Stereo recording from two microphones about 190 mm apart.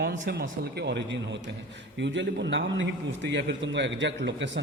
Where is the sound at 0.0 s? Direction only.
55° right (ahead or behind).